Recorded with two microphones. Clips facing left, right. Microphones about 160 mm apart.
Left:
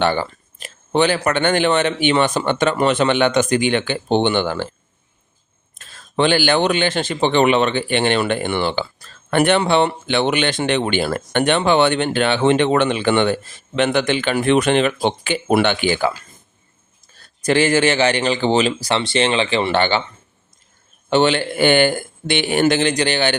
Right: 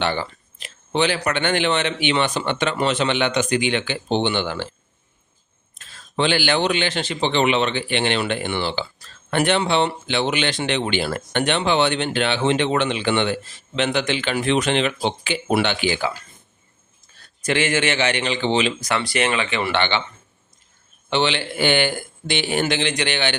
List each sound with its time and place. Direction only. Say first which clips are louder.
0.0 s speech: left 5 dB; 45° left (ahead or behind)
5.7 s speech: left 4 dB; 50° left (ahead or behind)
17.4 s speech: left 5 dB; 35° left (ahead or behind)
21.1 s speech: left 6 dB; 45° left (ahead or behind)